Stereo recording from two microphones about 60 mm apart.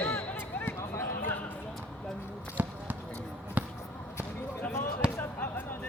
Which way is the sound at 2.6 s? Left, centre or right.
Right.